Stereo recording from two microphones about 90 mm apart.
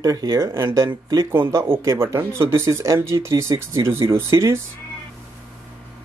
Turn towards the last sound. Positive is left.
turn(degrees=-30)  # may be behind; listen again after turning